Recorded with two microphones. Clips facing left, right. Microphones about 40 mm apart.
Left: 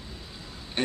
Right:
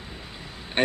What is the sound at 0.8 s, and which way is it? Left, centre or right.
Speech, right.